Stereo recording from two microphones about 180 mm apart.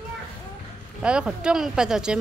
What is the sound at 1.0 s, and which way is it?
Speech, 5° right (ahead or behind).